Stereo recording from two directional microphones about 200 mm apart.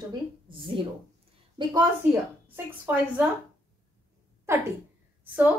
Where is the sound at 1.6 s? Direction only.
25° right (ahead or behind).